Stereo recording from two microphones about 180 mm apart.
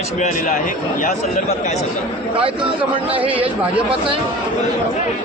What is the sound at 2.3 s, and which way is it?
Speech, 30° right (ahead or behind).